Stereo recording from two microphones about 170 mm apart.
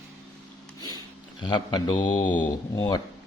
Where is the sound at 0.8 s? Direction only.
25° left (ahead or behind).